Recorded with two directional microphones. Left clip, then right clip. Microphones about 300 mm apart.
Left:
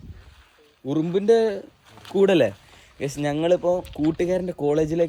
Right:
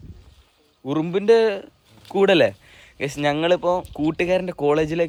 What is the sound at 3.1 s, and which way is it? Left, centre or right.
Speech, centre.